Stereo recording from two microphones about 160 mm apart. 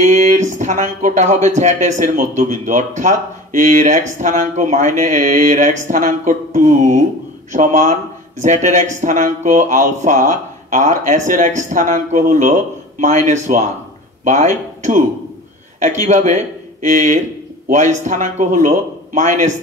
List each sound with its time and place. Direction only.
0.0 s speech: 50° right (ahead or behind)
16.1 s speech: 45° right (ahead or behind)